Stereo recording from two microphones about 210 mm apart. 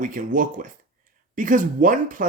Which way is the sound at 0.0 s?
40° right (ahead or behind).